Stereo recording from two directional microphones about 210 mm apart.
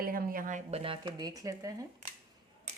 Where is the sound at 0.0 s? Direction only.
45° right (ahead or behind); by 1.7 s 15° right (ahead or behind).